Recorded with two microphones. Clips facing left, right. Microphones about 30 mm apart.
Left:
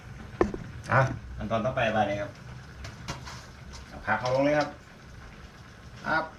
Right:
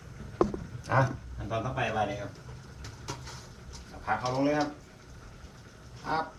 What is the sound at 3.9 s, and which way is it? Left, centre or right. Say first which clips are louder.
Speech: left 4 dB; left.